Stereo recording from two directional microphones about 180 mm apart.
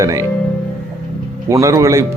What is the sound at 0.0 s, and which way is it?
Speech, 15° right (ahead or behind).